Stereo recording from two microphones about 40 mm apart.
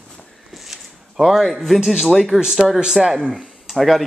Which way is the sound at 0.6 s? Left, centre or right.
Centre.